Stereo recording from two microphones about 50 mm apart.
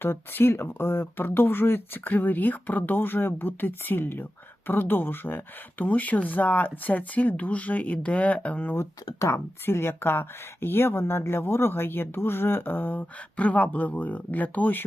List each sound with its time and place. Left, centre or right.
0.0 s a woman's voice: left
9.3 s a woman's voice: left
13.3 s speech: left